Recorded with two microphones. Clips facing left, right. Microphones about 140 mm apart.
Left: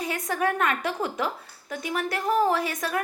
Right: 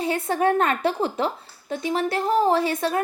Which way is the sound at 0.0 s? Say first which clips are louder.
Right 5 dB; 30° right (ahead or behind).